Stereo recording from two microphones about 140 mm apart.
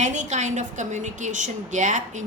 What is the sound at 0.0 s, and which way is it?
A woman's voice, 60° right (ahead or behind).